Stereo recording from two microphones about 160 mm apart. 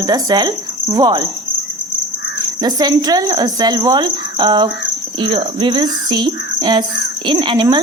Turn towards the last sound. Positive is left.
turn(degrees=-30)  # may be behind; listen again after turning